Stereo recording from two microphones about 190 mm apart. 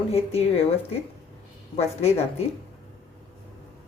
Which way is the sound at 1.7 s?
35° left (ahead or behind).